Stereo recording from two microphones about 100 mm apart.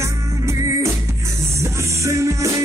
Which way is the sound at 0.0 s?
30° right (ahead or behind).